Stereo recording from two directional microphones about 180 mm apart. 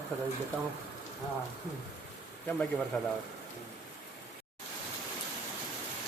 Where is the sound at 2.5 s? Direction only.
5° left (ahead or behind).